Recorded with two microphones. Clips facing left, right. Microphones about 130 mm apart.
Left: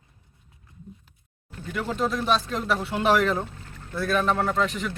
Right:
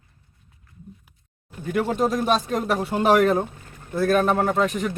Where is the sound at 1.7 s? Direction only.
50° right (ahead or behind).